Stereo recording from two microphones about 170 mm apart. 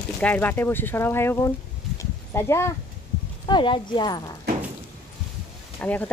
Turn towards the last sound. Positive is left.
turn(degrees=10)  # may be behind; listen again after turning